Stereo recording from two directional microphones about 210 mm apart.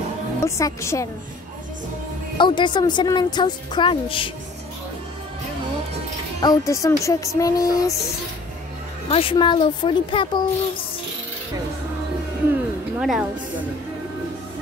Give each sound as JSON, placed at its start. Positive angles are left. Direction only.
{"t": 0.4, "sound": "music", "side_deg": 15}
{"t": 2.3, "sound": "a woman's voice", "side_deg": 20}
{"t": 6.4, "sound": "music", "side_deg": 15}
{"t": 9.1, "sound": "a woman's voice", "side_deg": 25}
{"t": 12.9, "sound": "speech", "side_deg": -5}